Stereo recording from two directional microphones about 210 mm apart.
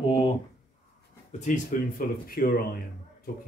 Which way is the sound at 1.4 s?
40° left (ahead or behind).